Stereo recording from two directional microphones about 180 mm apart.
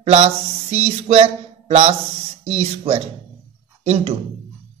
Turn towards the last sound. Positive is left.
turn(degrees=-35)  # may be behind; listen again after turning